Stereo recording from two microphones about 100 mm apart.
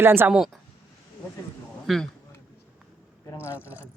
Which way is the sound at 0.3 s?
5° right (ahead or behind).